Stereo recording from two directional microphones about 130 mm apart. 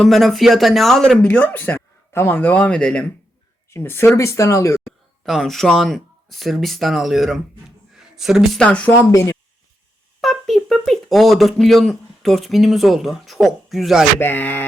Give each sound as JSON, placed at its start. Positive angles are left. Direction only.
{"t": 0.0, "sound": "speech", "side_deg": 0}
{"t": 3.7, "sound": "speech", "side_deg": 20}
{"t": 5.2, "sound": "speech", "side_deg": 0}
{"t": 8.6, "sound": "speech", "side_deg": 10}
{"t": 10.2, "sound": "speech", "side_deg": 0}
{"t": 14.2, "sound": "speech", "side_deg": 15}